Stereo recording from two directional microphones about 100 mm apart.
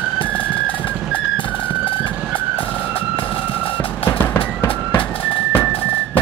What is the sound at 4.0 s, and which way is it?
Music, 20° left (ahead or behind).